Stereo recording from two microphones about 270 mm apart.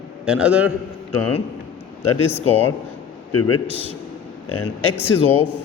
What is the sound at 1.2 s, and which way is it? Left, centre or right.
Speech, left.